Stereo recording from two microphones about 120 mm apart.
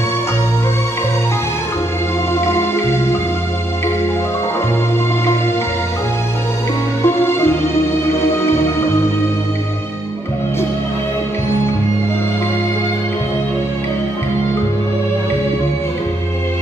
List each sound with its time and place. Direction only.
2.3 s music: 20° left (ahead or behind)
7.0 s music: 20° left (ahead or behind)